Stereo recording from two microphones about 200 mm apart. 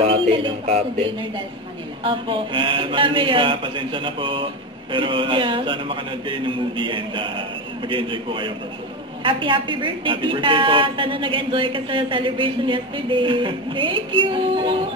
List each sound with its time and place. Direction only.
0.0 s a woman's voice: 25° right (ahead or behind)